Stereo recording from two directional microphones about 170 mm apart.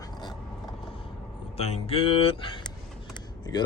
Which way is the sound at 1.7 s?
35° left (ahead or behind).